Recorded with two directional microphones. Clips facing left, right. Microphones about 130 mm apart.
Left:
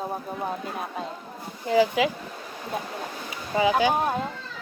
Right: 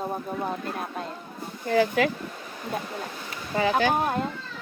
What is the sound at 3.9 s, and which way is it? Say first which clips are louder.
Speech: even; centre (ahead or behind).